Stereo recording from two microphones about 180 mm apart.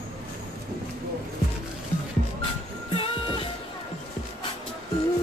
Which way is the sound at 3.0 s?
30° left (ahead or behind).